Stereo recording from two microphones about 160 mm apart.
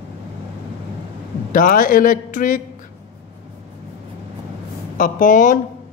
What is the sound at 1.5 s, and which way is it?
Speech, 60° left (ahead or behind).